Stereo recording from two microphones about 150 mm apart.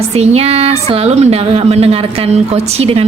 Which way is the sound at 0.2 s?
45° right (ahead or behind).